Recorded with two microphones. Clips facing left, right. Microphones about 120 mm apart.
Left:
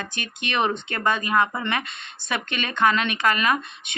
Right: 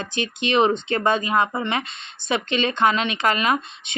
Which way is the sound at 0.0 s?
25° right (ahead or behind).